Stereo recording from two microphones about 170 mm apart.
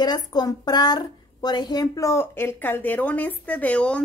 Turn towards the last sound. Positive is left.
turn(degrees=5)  # may be behind; listen again after turning